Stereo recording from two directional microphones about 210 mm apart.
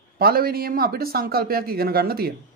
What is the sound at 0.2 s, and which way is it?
Speech, 45° right (ahead or behind).